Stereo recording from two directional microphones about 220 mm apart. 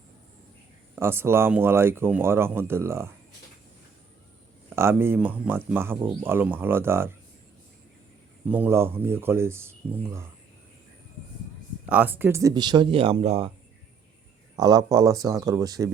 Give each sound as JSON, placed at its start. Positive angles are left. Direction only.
{"t": 0.9, "sound": "speech", "side_deg": -10}
{"t": 4.7, "sound": "speech", "side_deg": -10}
{"t": 8.4, "sound": "speech", "side_deg": -10}
{"t": 11.9, "sound": "speech", "side_deg": -10}
{"t": 14.5, "sound": "speech", "side_deg": -15}